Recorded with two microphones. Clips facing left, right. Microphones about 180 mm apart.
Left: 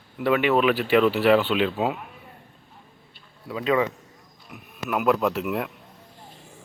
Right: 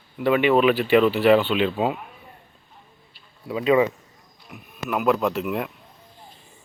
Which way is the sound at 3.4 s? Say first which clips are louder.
Right 4 dB; 10° right (ahead or behind).